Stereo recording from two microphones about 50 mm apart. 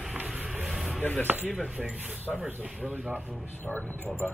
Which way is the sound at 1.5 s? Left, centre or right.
Centre.